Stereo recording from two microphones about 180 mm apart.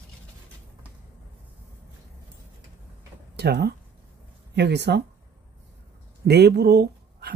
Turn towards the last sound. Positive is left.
turn(degrees=-65)  # may be behind; listen again after turning